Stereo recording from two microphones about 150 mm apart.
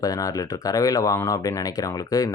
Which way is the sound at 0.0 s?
25° left (ahead or behind).